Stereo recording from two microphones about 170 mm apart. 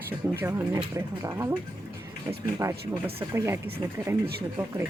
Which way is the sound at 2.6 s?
20° right (ahead or behind).